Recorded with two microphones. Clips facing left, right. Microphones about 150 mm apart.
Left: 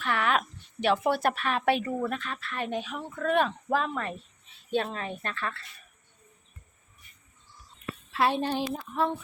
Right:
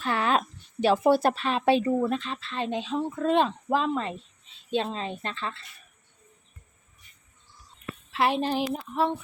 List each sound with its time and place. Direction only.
0.0 s speech: 30° right (ahead or behind)
8.1 s a woman's voice: centre (ahead or behind)